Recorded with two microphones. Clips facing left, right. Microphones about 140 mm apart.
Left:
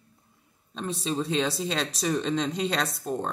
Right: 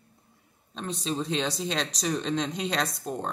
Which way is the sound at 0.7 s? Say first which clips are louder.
Left 1 dB; centre (ahead or behind).